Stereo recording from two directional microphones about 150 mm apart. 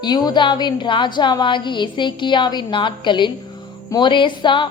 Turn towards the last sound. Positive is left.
turn(degrees=35)  # may be behind; listen again after turning